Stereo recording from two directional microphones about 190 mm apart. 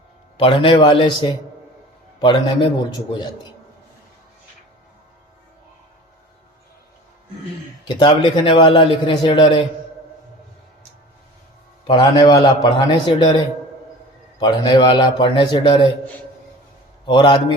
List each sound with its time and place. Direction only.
0.3 s a man's voice: 30° left (ahead or behind)
7.9 s a man's voice: 25° left (ahead or behind)
11.9 s a man's voice: 25° left (ahead or behind)
17.1 s a man's voice: 25° left (ahead or behind)